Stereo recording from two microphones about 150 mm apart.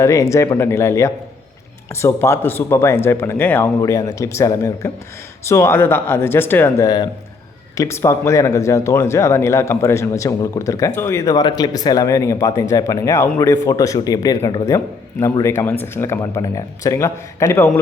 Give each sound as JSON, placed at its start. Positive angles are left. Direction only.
{"t": 0.0, "sound": "speech", "side_deg": 20}
{"t": 6.8, "sound": "speech", "side_deg": 30}
{"t": 7.8, "sound": "speech", "side_deg": 20}